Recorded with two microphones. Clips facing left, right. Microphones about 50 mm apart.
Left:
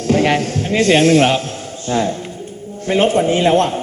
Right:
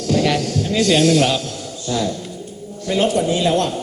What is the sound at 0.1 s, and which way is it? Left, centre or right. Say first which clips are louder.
A man's voice: left 3 dB; left.